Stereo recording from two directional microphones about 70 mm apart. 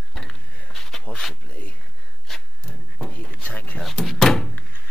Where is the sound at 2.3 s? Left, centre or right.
Centre.